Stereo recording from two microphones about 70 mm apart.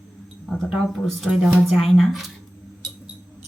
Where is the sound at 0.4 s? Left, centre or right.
Centre.